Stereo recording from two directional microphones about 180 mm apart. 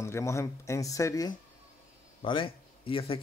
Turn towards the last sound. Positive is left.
turn(degrees=30)  # may be behind; listen again after turning